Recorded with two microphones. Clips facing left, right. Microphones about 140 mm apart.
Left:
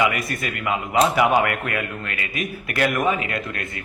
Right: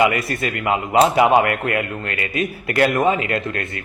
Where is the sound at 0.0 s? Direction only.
30° right (ahead or behind).